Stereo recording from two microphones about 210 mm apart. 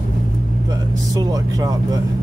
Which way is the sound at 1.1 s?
15° right (ahead or behind).